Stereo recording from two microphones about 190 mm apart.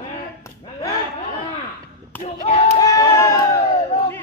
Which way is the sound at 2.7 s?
20° left (ahead or behind).